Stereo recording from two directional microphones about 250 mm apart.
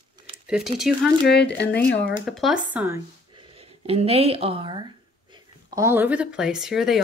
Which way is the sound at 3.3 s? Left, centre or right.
Right.